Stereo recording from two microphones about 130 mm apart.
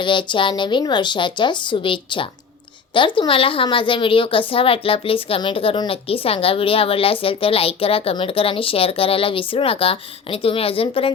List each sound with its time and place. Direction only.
0.0 s a woman's voice: 40° left (ahead or behind)